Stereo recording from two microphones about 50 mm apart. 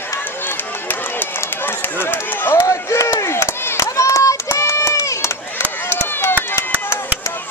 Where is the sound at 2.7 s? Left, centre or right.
Left.